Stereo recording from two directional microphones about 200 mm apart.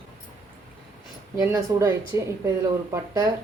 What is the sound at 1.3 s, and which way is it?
Speech, 20° right (ahead or behind).